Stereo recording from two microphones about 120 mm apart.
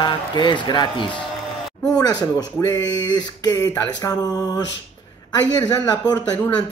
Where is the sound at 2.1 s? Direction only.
35° left (ahead or behind).